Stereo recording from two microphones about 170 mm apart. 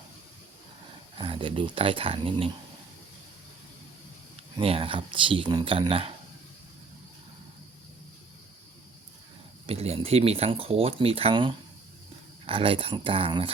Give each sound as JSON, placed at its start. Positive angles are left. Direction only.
{"t": 1.1, "sound": "speech", "side_deg": -30}
{"t": 4.5, "sound": "speech", "side_deg": -35}
{"t": 9.6, "sound": "speech", "side_deg": -35}